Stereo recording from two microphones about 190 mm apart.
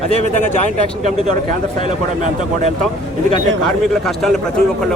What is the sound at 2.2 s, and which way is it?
Speech, 40° right (ahead or behind).